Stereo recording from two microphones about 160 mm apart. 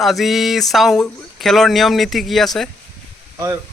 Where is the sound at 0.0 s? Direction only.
Centre (ahead or behind).